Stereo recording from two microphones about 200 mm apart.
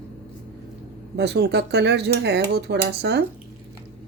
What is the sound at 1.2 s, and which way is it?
Speech, 55° right (ahead or behind).